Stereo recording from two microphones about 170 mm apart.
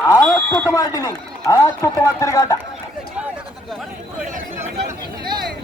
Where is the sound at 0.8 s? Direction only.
20° left (ahead or behind).